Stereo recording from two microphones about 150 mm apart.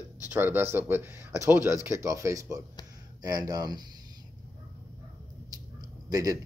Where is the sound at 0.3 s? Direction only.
15° right (ahead or behind).